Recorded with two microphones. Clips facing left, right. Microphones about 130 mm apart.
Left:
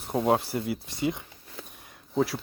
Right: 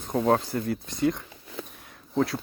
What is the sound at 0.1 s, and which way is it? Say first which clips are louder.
Speech: right 1 dB; 10° left (ahead or behind).